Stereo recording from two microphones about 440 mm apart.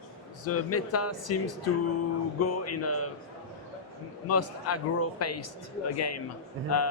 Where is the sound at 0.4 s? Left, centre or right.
Left.